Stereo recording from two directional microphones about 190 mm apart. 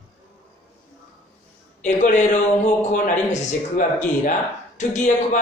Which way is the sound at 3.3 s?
40° left (ahead or behind).